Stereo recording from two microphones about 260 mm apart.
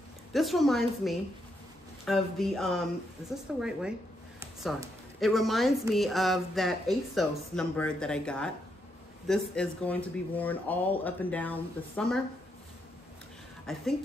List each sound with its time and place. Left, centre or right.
0.3 s a woman's voice: centre
13.7 s a woman's voice: centre